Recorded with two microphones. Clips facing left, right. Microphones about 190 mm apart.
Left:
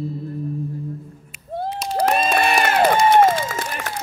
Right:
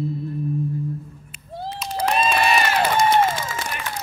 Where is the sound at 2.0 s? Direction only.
50° left (ahead or behind).